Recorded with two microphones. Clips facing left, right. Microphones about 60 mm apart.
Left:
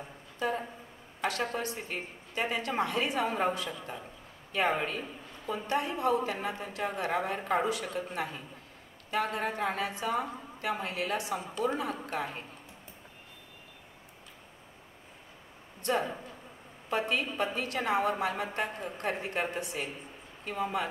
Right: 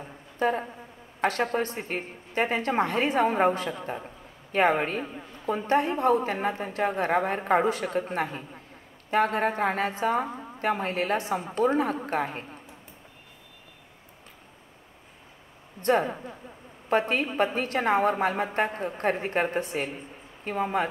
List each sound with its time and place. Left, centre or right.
0.4 s a woman's voice: right
15.8 s a woman's voice: right